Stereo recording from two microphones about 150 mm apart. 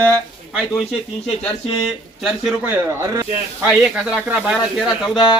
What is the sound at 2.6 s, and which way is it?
Speech, 15° right (ahead or behind).